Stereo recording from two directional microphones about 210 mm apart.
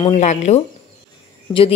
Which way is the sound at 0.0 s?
35° left (ahead or behind).